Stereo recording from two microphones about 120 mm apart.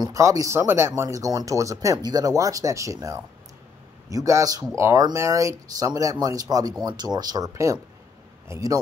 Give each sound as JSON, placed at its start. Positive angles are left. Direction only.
{"t": 0.0, "sound": "speech", "side_deg": -25}